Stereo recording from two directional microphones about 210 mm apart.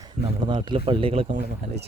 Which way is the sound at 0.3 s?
20° right (ahead or behind).